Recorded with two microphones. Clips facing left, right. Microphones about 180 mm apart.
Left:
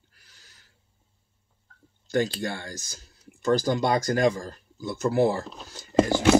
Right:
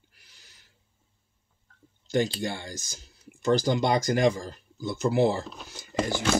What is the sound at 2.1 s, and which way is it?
Speech, 15° right (ahead or behind).